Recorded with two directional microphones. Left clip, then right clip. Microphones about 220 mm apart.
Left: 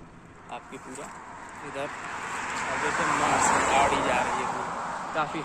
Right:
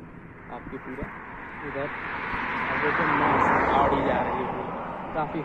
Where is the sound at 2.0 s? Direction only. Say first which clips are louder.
Right 3 dB; 60° left (ahead or behind).